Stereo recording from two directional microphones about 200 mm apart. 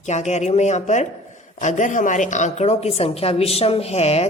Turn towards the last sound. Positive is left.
turn(degrees=30)  # may be behind; listen again after turning